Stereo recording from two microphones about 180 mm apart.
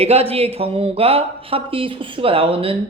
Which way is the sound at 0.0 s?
35° right (ahead or behind).